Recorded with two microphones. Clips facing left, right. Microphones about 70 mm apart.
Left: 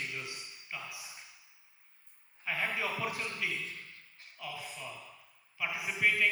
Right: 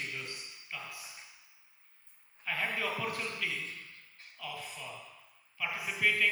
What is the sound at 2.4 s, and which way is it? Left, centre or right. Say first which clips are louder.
A man's voice: even; centre.